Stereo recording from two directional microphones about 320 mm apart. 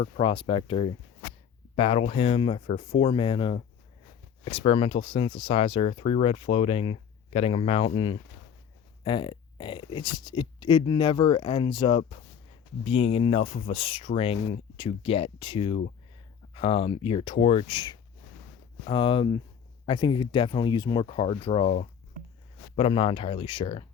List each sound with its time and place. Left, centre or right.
0.0 s speech: centre